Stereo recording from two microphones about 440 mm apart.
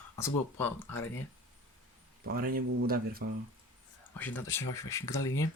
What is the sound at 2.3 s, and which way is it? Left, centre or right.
Speech, centre.